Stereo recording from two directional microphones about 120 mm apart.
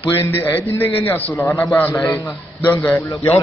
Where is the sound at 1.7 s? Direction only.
15° left (ahead or behind).